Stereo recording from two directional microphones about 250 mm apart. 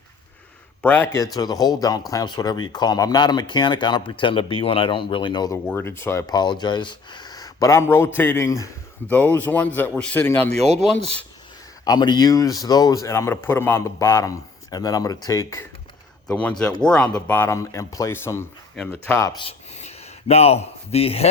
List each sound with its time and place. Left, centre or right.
0.8 s speech: centre
10.5 s speech: right
10.8 s speech: centre
11.9 s speech: centre